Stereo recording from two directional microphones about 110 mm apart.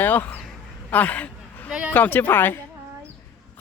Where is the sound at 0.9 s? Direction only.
15° left (ahead or behind).